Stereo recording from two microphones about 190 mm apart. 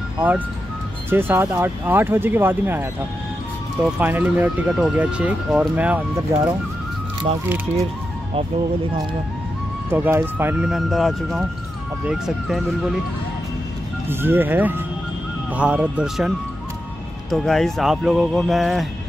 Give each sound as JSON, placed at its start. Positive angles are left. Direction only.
{"t": 1.1, "sound": "speech", "side_deg": -10}
{"t": 9.8, "sound": "speech", "side_deg": -10}
{"t": 14.0, "sound": "speech", "side_deg": -10}